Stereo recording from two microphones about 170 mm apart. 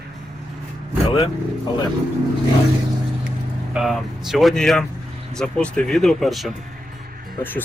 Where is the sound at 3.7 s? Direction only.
Centre (ahead or behind).